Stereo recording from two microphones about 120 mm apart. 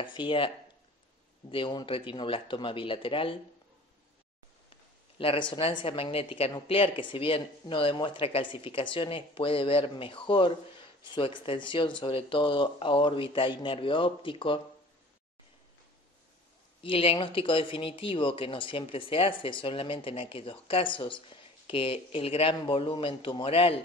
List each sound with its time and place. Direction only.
0.0 s speech: 45° left (ahead or behind)
1.5 s speech: 40° left (ahead or behind)
5.2 s speech: 50° left (ahead or behind)
16.8 s speech: 50° left (ahead or behind)